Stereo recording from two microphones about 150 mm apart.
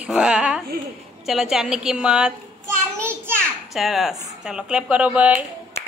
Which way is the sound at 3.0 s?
15° right (ahead or behind).